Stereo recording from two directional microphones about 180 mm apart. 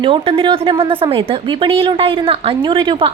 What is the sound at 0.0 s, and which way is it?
Speech, 30° right (ahead or behind).